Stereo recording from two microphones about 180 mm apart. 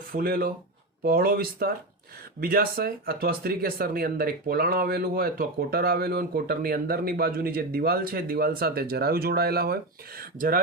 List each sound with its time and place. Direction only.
0.1 s speech: 55° right (ahead or behind)